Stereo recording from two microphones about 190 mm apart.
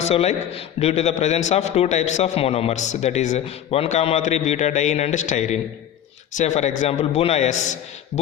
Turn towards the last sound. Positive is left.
turn(degrees=40)  # may be behind; listen again after turning